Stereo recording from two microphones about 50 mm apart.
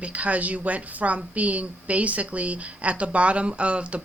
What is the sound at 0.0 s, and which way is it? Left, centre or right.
A woman's voice, right.